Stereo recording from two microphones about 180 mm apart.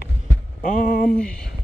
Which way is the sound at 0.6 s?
50° left (ahead or behind).